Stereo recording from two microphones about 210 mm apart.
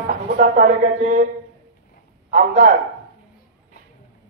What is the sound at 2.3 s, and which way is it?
Speech, 40° right (ahead or behind).